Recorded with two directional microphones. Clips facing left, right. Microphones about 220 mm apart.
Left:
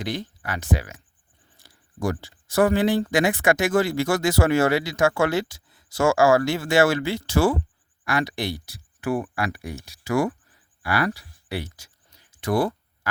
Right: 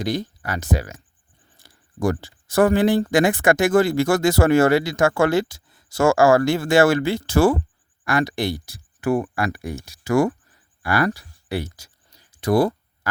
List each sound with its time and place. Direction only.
0.0 s speech: 40° right (ahead or behind)
1.5 s speech: 50° right (ahead or behind)
10.8 s a sound: 45° right (ahead or behind)